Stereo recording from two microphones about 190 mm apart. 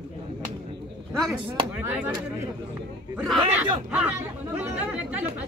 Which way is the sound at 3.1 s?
Centre (ahead or behind).